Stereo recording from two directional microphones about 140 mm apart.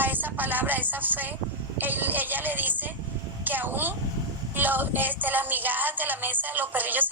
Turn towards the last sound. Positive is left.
turn(degrees=-15)  # may be behind; listen again after turning